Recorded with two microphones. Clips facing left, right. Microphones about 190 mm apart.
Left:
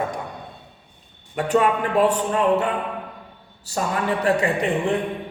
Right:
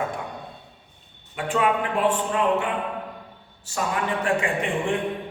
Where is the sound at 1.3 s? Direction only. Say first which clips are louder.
Left 4 dB; 40° left (ahead or behind).